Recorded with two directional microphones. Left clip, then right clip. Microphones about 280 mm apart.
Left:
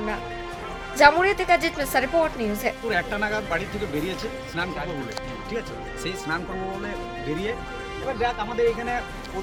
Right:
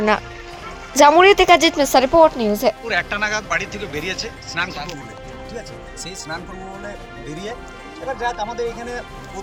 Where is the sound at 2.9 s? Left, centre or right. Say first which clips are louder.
Right 4 dB; centre.